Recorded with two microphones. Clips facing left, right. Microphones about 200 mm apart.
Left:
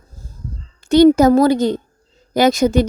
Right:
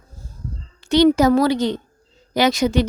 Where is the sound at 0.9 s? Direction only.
45° left (ahead or behind).